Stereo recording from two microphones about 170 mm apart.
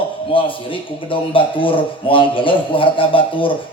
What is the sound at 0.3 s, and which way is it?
A man's voice, 30° left (ahead or behind).